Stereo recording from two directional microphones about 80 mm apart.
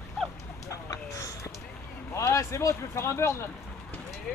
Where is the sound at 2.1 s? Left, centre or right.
Left.